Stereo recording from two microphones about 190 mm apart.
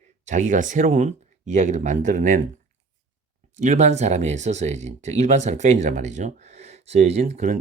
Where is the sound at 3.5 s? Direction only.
40° right (ahead or behind).